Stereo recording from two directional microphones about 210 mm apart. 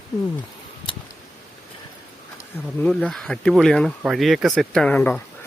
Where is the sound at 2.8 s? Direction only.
5° left (ahead or behind).